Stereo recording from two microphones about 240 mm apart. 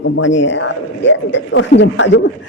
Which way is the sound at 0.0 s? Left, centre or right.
Left.